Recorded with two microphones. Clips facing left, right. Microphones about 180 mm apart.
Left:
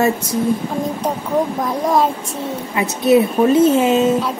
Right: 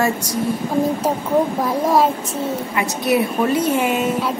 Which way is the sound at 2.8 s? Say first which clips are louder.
Left 6 dB; 25° left (ahead or behind).